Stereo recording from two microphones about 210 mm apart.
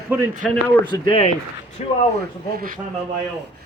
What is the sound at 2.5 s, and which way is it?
Speech, 45° right (ahead or behind).